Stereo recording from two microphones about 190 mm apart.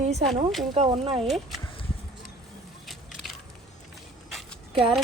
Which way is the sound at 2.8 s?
Centre (ahead or behind).